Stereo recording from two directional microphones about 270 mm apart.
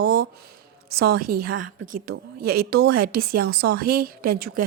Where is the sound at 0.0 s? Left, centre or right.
Right.